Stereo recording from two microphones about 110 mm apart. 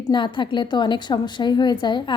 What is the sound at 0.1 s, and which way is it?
A woman's voice, 45° left (ahead or behind).